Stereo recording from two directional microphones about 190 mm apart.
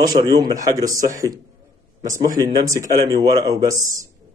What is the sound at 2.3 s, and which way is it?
Speech, 20° right (ahead or behind).